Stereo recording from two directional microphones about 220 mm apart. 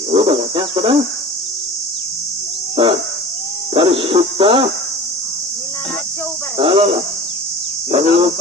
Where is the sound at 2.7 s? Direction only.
25° right (ahead or behind).